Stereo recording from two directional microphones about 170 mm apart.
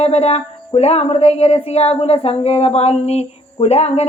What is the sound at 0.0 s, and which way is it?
Speech, 40° left (ahead or behind).